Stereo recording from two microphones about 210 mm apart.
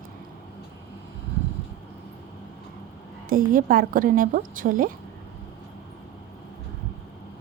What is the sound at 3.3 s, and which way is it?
A woman's voice, 40° right (ahead or behind).